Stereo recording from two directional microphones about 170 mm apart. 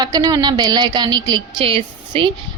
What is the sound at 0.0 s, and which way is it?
A woman's voice, 25° right (ahead or behind).